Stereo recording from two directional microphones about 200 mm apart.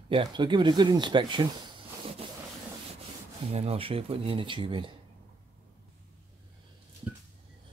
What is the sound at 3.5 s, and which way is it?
Speech, 30° right (ahead or behind).